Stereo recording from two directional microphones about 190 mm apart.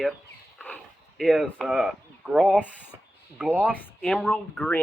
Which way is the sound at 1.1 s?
Centre (ahead or behind).